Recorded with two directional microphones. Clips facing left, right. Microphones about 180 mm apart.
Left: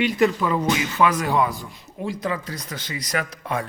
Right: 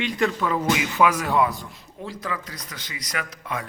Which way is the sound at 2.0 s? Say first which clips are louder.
Left 6 dB; 15° left (ahead or behind).